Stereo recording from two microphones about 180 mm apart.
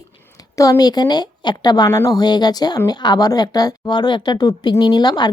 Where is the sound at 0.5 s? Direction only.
20° left (ahead or behind).